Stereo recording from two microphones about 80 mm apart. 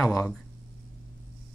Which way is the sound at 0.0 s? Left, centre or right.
Centre.